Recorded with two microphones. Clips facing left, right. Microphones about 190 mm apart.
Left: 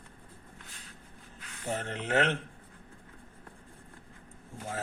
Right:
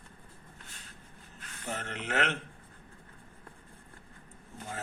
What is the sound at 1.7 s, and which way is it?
Speech, 35° left (ahead or behind).